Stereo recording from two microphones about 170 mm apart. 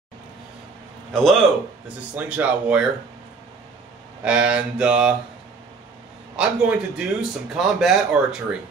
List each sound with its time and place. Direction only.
1.1 s speech: centre (ahead or behind)
4.2 s speech: 5° right (ahead or behind)
6.3 s speech: 5° right (ahead or behind)